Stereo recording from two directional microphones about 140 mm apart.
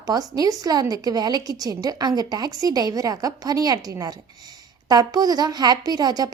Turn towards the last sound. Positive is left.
turn(degrees=-30)  # may be behind; listen again after turning